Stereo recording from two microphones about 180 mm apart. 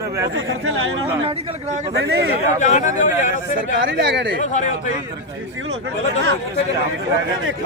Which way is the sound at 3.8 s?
80° right.